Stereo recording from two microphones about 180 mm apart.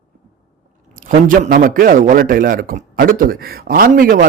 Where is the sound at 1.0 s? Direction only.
50° right (ahead or behind).